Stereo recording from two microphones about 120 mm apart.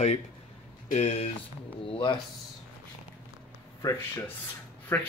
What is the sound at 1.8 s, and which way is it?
Speech, 45° left (ahead or behind).